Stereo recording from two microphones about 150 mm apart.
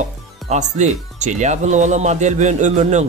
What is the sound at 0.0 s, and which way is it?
Speech, 50° right (ahead or behind).